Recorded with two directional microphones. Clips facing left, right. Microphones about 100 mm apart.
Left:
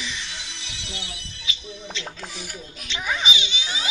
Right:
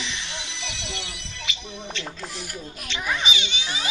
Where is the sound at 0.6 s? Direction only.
90° right; by 2.0 s 65° right (ahead or behind).